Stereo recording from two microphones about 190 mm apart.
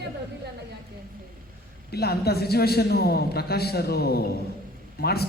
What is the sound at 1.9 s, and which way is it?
A man's voice, 55° left (ahead or behind).